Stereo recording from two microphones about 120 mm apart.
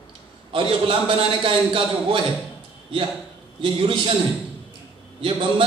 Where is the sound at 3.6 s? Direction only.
45° right (ahead or behind).